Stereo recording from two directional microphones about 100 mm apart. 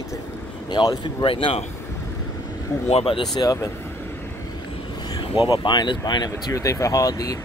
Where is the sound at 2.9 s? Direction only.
65° left (ahead or behind).